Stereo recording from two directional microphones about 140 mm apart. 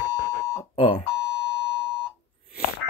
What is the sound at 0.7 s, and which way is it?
Speech, 40° left (ahead or behind).